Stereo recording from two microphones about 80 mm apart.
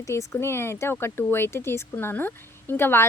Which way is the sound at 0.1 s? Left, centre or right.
Left.